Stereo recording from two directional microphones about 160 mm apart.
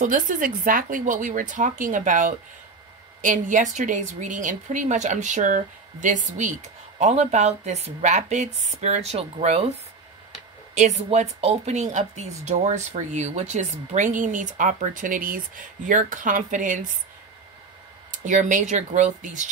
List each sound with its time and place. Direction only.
0.0 s a woman's voice: 55° right (ahead or behind)
18.1 s speech: 50° right (ahead or behind)